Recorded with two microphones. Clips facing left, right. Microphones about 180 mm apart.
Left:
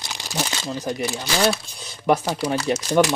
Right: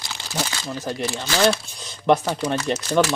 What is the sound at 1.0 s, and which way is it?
Speech, 15° left (ahead or behind).